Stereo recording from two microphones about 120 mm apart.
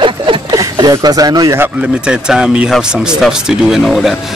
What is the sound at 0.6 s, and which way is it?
Speech, 30° right (ahead or behind).